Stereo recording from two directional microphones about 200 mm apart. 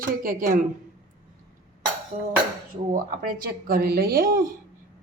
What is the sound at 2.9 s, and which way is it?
Speech, 45° right (ahead or behind).